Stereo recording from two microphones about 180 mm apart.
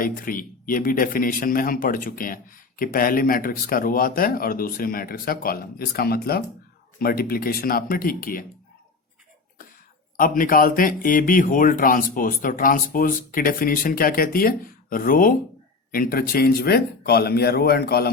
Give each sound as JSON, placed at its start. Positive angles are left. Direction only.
{"t": 0.0, "sound": "a man's voice", "side_deg": 50}
{"t": 10.2, "sound": "a man's voice", "side_deg": 50}